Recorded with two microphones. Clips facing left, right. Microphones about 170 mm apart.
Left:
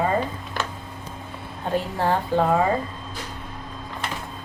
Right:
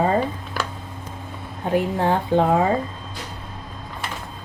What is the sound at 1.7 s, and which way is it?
Speech, 15° right (ahead or behind).